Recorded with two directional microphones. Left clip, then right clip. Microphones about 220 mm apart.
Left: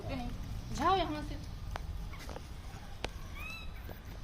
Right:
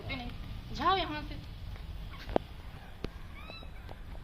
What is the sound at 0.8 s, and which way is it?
Speech, 30° left (ahead or behind).